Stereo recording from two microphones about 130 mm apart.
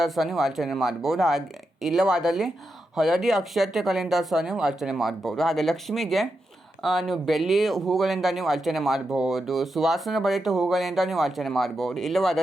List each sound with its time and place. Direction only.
0.0 s speech: centre (ahead or behind)